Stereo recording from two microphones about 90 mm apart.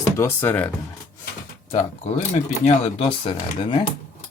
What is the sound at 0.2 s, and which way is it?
Speech, 30° left (ahead or behind).